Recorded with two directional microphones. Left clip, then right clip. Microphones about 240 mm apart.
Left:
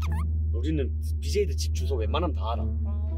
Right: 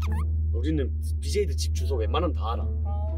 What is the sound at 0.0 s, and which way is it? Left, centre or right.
Speech, centre.